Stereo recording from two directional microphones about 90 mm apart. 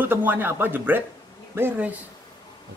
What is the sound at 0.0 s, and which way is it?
A woman's voice, 20° right (ahead or behind).